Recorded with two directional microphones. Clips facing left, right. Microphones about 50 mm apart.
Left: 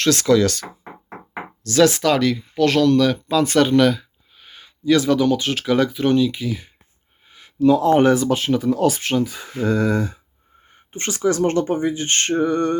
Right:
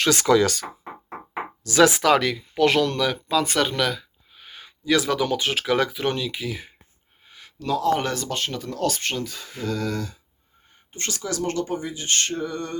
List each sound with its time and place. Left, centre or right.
0.0 s speech: centre
3.2 s speech: centre
7.3 s a sound: centre
7.8 s speech: left
8.1 s speech: centre; by 12.7 s left